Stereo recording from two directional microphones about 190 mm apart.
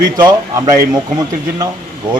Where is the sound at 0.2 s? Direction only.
20° right (ahead or behind).